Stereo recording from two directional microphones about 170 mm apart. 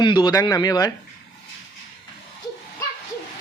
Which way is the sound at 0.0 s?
25° left (ahead or behind).